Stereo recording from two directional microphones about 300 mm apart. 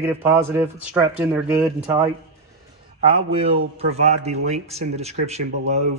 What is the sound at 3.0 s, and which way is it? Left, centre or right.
A man's voice, centre.